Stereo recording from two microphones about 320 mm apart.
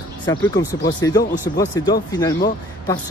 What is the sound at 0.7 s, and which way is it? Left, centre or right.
Speech, left.